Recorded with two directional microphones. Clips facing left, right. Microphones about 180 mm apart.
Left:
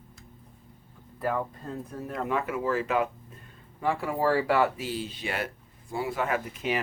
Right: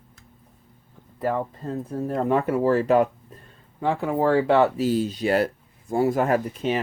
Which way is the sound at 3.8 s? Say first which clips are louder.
Right 4 dB; 20° right (ahead or behind).